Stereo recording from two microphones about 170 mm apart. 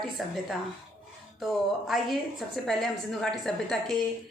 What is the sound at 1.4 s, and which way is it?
A woman's voice, centre (ahead or behind).